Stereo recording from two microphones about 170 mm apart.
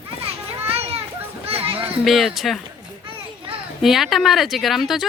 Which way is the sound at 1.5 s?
35° right (ahead or behind).